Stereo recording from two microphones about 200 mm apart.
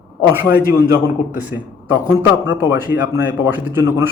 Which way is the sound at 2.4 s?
10° right (ahead or behind).